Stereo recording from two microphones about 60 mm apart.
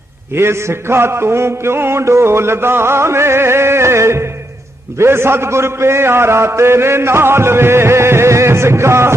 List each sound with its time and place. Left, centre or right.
0.3 s a man's voice: right